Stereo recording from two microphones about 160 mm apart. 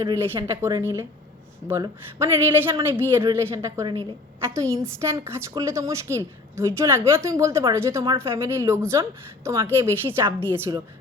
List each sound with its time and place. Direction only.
0.0 s a woman's voice: 20° right (ahead or behind)